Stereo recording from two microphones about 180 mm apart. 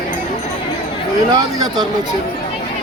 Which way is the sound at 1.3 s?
20° right (ahead or behind).